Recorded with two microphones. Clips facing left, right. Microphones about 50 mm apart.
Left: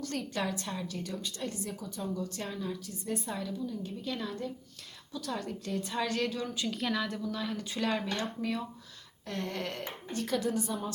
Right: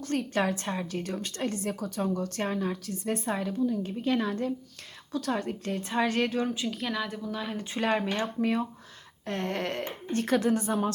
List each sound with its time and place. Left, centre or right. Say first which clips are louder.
0.1 s speech: right 9 dB; right
1.4 s a woman's voice: right 7 dB; right
2.8 s a woman's voice: right 5 dB; right
3.2 s speech: right 7 dB; right
5.3 s speech: right 4 dB; right
6.0 s speech: right 7 dB; right
6.7 s a woman's voice: right 1 dB; centre
7.5 s speech: right 7 dB; right